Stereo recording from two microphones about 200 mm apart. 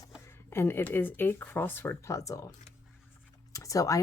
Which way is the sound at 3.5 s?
15° left (ahead or behind).